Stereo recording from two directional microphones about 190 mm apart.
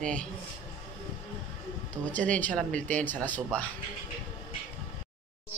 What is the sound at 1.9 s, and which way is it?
Speech, 5° left (ahead or behind).